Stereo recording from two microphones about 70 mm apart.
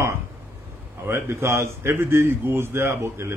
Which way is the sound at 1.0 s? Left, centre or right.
Right.